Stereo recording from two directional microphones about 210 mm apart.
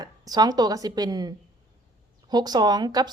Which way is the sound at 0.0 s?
20° right (ahead or behind).